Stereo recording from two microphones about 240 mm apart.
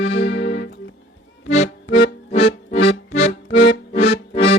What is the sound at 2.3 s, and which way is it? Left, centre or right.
Music, left.